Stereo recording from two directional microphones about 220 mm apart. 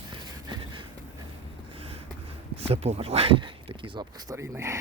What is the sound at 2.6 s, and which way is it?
Speech, 25° right (ahead or behind).